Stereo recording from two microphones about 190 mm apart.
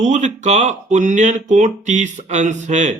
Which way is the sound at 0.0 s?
40° right (ahead or behind).